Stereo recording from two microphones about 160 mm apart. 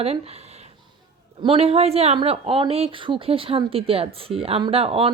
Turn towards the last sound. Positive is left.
turn(degrees=-40)  # may be behind; listen again after turning